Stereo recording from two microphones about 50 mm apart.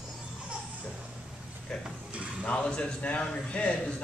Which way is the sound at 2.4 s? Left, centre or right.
Left.